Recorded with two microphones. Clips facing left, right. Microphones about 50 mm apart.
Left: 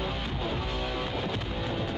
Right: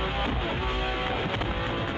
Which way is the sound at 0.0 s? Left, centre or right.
Right.